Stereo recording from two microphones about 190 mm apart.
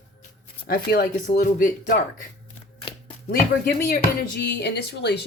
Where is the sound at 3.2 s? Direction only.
50° left (ahead or behind).